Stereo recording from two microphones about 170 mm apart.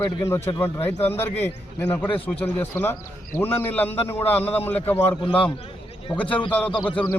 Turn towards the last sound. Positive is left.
turn(degrees=30)  # may be behind; listen again after turning